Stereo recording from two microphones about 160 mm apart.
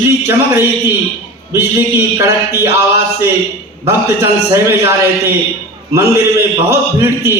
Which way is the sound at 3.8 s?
15° right (ahead or behind).